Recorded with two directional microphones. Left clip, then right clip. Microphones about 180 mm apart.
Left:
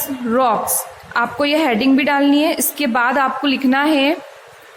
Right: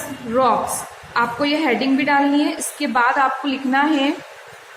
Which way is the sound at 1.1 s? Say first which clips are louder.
Left 2 dB; 60° left (ahead or behind).